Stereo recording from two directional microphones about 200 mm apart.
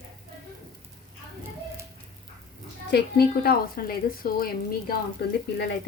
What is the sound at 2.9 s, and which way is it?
Speech, 50° left (ahead or behind).